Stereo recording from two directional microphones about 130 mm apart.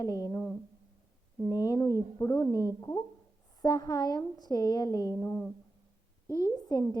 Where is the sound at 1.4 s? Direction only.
25° left (ahead or behind).